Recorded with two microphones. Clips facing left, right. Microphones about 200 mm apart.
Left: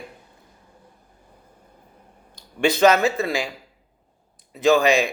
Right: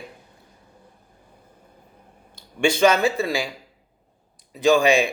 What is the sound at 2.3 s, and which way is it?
Speech, 30° right (ahead or behind).